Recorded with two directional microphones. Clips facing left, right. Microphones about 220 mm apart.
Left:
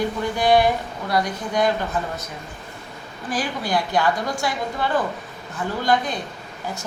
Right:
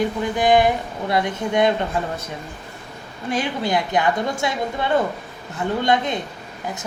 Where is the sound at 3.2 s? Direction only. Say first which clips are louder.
Right 3 dB; 25° right (ahead or behind).